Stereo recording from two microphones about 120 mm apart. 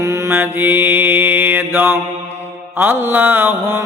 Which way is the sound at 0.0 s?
25° right (ahead or behind).